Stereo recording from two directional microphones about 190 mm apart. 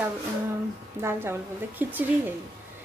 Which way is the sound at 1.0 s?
15° right (ahead or behind).